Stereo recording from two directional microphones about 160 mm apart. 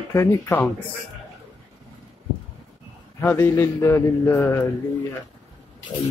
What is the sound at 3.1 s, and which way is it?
Speech, 15° left (ahead or behind).